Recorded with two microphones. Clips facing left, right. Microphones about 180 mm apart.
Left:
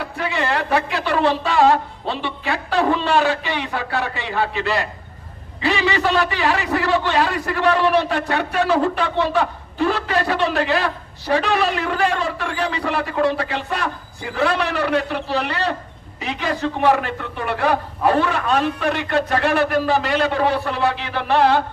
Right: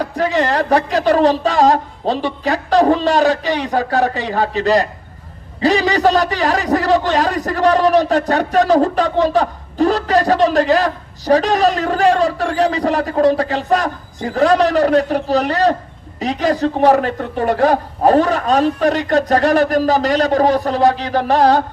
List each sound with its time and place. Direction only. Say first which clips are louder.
0.0 s a man's voice: right 7 dB; 40° right (ahead or behind)